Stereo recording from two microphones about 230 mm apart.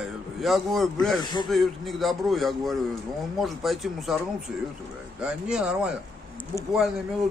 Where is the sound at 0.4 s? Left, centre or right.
Centre.